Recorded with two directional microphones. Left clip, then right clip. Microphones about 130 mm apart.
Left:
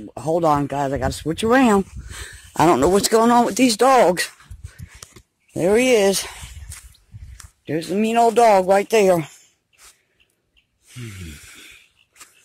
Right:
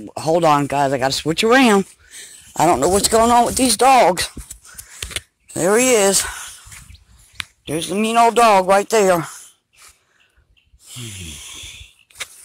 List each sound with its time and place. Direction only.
0.1 s speech: 5° right (ahead or behind)
2.0 s speech: 45° left (ahead or behind)
5.6 s speech: centre (ahead or behind)
7.6 s speech: centre (ahead or behind)
8.5 s speech: 25° right (ahead or behind)
8.7 s speech: centre (ahead or behind)
10.9 s speech: 5° left (ahead or behind)